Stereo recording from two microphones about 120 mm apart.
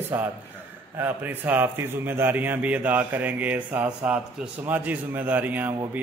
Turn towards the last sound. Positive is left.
turn(degrees=-15)  # may be behind; listen again after turning